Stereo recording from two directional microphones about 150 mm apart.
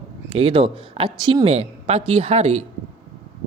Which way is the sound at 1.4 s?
45° right (ahead or behind).